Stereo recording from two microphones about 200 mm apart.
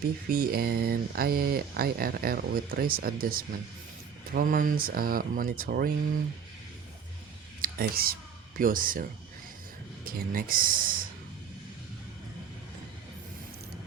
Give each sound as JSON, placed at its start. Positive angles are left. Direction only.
{"t": 0.3, "sound": "speech", "side_deg": -45}
{"t": 7.6, "sound": "speech", "side_deg": -50}